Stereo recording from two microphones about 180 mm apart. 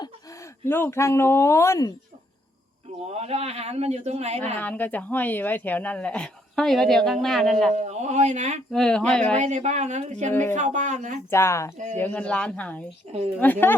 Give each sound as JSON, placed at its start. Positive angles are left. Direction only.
{"t": 0.0, "sound": "speech", "side_deg": 20}
{"t": 3.1, "sound": "a man's voice", "side_deg": -35}
{"t": 4.6, "sound": "speech", "side_deg": 10}
{"t": 7.8, "sound": "a man's voice", "side_deg": -40}
{"t": 8.7, "sound": "speech", "side_deg": 5}
{"t": 9.4, "sound": "a man's voice", "side_deg": -40}
{"t": 11.3, "sound": "speech", "side_deg": 15}
{"t": 13.1, "sound": "a man's voice", "side_deg": -35}
{"t": 13.4, "sound": "speech", "side_deg": 10}